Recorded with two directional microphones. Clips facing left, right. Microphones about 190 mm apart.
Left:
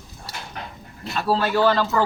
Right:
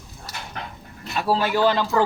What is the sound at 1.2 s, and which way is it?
Speech, 10° right (ahead or behind).